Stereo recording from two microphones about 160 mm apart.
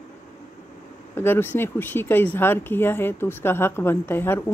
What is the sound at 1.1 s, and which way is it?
Speech, 15° left (ahead or behind).